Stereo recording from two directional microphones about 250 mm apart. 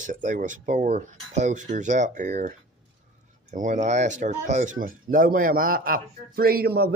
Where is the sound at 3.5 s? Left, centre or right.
Right.